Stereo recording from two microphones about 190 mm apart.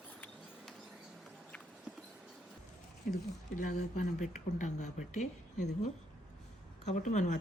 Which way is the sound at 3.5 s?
40° left (ahead or behind).